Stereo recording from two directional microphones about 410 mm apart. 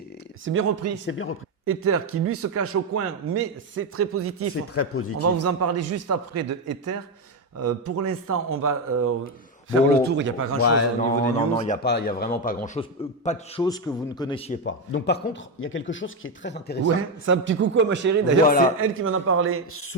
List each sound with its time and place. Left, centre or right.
0.4 s a man's voice: right
1.0 s a man's voice: left
1.6 s a man's voice: right
4.7 s speech: left
5.2 s a man's voice: right
10.6 s speech: left
11.3 s a man's voice: centre
16.8 s a man's voice: right
19.7 s speech: left